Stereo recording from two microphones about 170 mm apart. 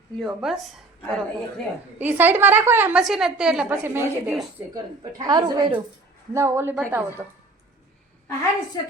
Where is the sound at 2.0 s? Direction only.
10° right (ahead or behind).